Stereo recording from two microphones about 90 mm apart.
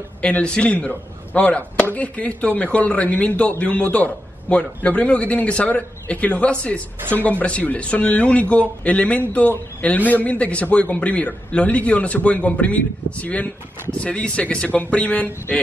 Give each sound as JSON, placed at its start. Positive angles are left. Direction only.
{"t": 0.2, "sound": "a man's voice", "side_deg": 10}